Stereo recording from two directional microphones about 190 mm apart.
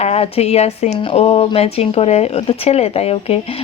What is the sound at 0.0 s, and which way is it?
A woman's voice, 35° left (ahead or behind).